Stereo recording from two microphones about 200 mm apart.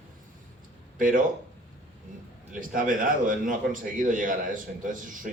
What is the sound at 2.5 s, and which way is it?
A man's voice, 40° right (ahead or behind).